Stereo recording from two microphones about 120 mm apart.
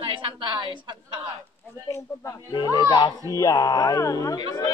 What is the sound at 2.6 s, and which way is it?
Speech, 35° left (ahead or behind).